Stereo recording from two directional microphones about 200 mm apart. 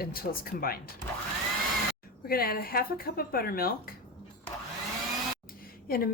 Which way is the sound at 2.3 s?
50° left (ahead or behind).